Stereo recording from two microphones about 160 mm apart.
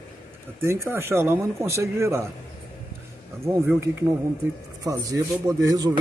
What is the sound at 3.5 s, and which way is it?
Speech, 15° right (ahead or behind).